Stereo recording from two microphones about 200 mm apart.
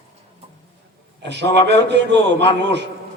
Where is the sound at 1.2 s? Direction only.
60° right (ahead or behind).